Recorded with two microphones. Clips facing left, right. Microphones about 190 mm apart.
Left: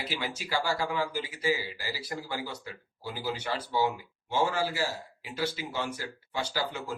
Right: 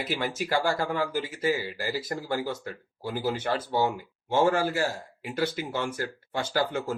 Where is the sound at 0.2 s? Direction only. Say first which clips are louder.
Right 5 dB; 50° right (ahead or behind).